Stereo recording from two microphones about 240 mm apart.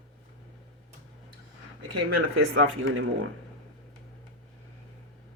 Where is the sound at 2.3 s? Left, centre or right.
Right.